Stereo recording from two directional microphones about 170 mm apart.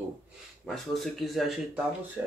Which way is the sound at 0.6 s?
Centre (ahead or behind).